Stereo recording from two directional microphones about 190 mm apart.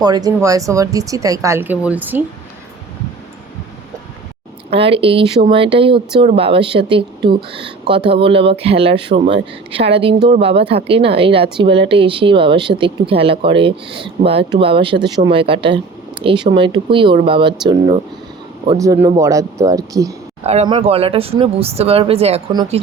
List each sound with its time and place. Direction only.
0.0 s speech: 20° right (ahead or behind)
4.7 s speech: 30° right (ahead or behind)
18.8 s speech: 15° right (ahead or behind)
20.4 s speech: 35° right (ahead or behind)